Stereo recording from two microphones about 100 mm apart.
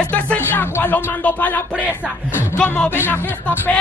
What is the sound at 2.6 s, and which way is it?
Speech, 15° left (ahead or behind).